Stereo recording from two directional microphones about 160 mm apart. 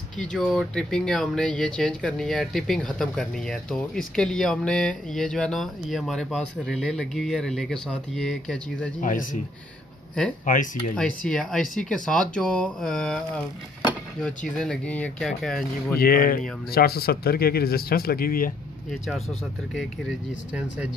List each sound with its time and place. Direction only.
0.2 s speech: 5° left (ahead or behind)
9.0 s speech: 55° left (ahead or behind)
10.4 s speech: 55° left (ahead or behind)
11.0 s speech: 5° left (ahead or behind)
14.6 s speech: 5° left (ahead or behind)
16.0 s speech: 65° left (ahead or behind)
18.9 s speech: centre (ahead or behind)